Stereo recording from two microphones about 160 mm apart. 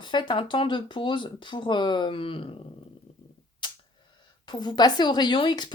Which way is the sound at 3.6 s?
30° left (ahead or behind).